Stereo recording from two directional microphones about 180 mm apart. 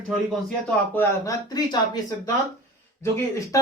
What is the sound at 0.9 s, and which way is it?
A man's voice, 15° left (ahead or behind).